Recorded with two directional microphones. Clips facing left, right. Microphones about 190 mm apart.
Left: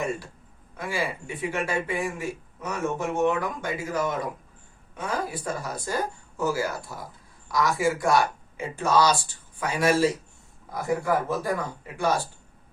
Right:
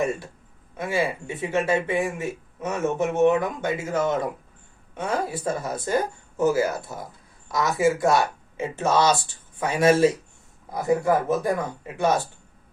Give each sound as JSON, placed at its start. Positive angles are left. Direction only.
{"t": 0.8, "sound": "speech", "side_deg": -25}